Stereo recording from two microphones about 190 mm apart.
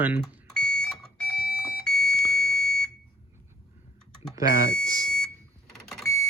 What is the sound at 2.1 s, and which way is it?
Smoke detector, 55° left (ahead or behind).